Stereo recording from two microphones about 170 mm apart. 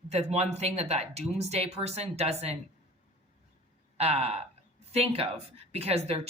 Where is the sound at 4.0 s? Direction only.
35° right (ahead or behind).